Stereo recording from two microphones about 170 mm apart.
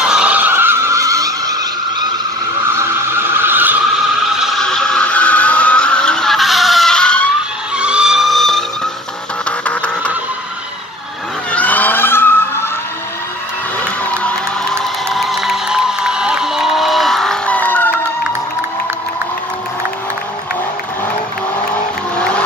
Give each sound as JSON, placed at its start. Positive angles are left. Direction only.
{"t": 0.0, "sound": "vehicle", "side_deg": -5}
{"t": 3.3, "sound": "a sound", "side_deg": -10}
{"t": 4.4, "sound": "vehicle", "side_deg": 0}
{"t": 7.7, "sound": "vehicle", "side_deg": -5}
{"t": 9.7, "sound": "music", "side_deg": 10}
{"t": 11.5, "sound": "vehicle", "side_deg": 10}
{"t": 14.2, "sound": "crowd", "side_deg": 5}